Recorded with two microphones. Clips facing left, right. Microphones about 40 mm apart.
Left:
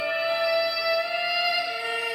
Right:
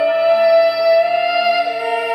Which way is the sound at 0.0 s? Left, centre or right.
Centre.